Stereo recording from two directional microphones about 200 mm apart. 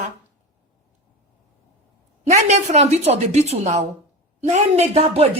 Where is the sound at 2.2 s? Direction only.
35° right (ahead or behind).